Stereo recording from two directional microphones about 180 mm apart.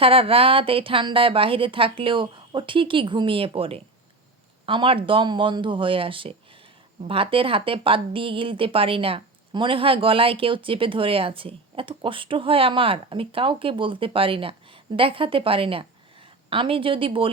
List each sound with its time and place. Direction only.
0.0 s speech: 30° right (ahead or behind)